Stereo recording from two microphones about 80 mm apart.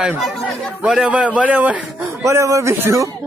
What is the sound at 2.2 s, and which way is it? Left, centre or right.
Speech, right.